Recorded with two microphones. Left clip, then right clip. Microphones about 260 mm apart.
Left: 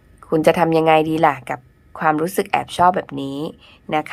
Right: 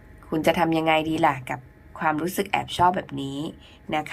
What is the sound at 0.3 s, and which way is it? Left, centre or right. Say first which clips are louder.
A woman's voice: left 7 dB; centre.